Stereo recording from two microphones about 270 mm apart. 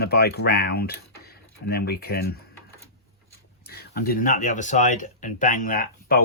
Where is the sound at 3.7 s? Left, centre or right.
Left.